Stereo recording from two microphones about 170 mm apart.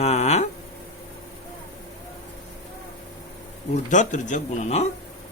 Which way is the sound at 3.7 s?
45° left (ahead or behind).